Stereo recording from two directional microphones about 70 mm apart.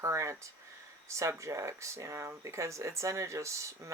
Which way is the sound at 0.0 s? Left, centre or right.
Right.